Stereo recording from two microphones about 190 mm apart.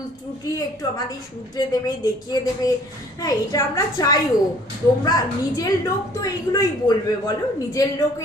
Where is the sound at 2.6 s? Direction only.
20° left (ahead or behind).